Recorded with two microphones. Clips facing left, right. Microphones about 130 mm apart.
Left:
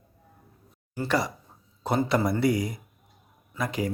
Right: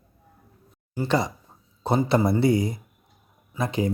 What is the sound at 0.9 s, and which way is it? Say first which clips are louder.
Speech: right 3 dB; 20° right (ahead or behind).